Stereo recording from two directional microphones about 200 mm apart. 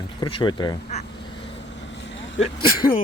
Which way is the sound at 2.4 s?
25° left (ahead or behind).